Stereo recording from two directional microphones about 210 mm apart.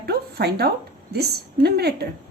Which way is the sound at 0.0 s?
50° right (ahead or behind).